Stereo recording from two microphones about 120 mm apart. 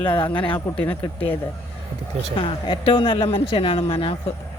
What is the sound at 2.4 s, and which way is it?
Speech, 40° left (ahead or behind).